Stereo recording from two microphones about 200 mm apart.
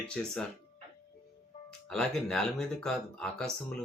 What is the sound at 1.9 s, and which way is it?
Speech, centre (ahead or behind).